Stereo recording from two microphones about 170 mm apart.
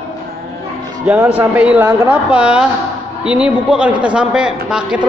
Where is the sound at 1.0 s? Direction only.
10° right (ahead or behind).